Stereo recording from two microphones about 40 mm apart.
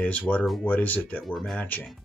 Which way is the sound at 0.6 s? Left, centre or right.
Left.